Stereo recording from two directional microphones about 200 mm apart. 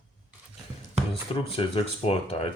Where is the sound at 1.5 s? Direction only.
30° left (ahead or behind).